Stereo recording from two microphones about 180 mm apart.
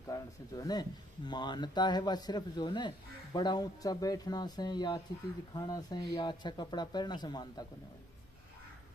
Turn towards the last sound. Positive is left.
turn(degrees=25)  # may be behind; listen again after turning